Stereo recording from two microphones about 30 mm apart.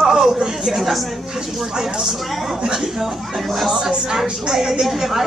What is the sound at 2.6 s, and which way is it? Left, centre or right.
Speech, centre.